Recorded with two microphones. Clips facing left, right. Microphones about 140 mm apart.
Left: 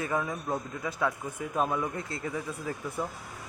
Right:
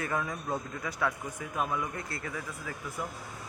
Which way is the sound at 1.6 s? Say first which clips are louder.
Left 3 dB; 25° left (ahead or behind).